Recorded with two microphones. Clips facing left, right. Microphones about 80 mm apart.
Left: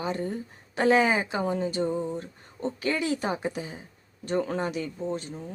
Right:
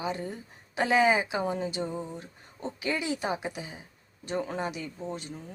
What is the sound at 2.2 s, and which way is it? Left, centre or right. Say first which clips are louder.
Speech: left 5 dB; centre.